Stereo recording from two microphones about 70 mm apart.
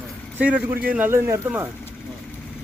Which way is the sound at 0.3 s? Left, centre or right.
Right.